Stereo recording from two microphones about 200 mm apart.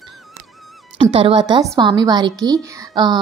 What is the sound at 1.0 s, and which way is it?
Speech, 25° right (ahead or behind).